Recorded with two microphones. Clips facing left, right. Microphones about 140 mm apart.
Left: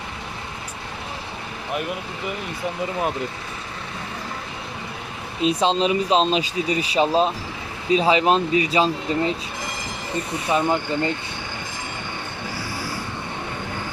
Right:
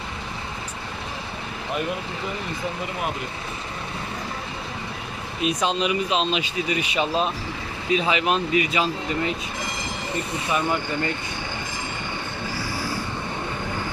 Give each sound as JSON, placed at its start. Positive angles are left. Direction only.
{"t": 5.4, "sound": "speech", "side_deg": 30}
{"t": 10.5, "sound": "speech", "side_deg": 25}